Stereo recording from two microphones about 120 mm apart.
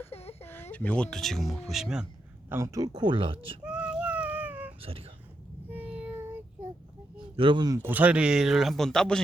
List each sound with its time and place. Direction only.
0.0 s a sound: 60° left (ahead or behind)
0.4 s speech: 15° left (ahead or behind); by 2.0 s 5° right (ahead or behind)
2.5 s speech: 20° right (ahead or behind); by 3.6 s 45° right (ahead or behind)
3.6 s child singing: 10° right (ahead or behind)
4.8 s speech: 50° right (ahead or behind)
5.7 s child singing: 10° right (ahead or behind)
7.2 s speech: 45° right (ahead or behind)
7.8 s speech: 15° right (ahead or behind); by 9.2 s 5° left (ahead or behind)